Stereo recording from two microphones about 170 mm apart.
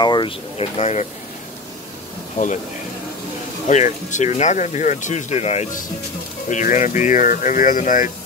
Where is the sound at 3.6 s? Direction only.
45° left (ahead or behind).